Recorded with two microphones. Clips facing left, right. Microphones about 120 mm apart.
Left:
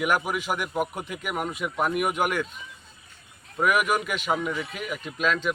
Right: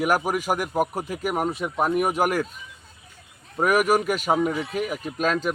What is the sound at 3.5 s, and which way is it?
A man's voice, 40° right (ahead or behind).